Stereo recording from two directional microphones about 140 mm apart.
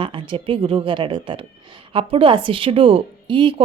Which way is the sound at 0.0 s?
35° right (ahead or behind).